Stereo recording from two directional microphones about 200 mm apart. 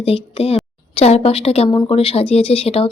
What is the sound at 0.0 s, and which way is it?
A woman's voice, 30° left (ahead or behind).